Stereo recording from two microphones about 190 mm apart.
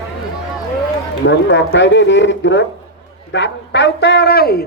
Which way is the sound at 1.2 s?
70° left (ahead or behind).